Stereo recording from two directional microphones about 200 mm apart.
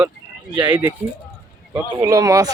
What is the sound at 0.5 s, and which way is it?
Speech, 20° right (ahead or behind).